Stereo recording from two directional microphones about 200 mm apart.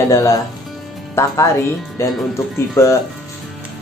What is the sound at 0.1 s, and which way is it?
Speech, 15° left (ahead or behind).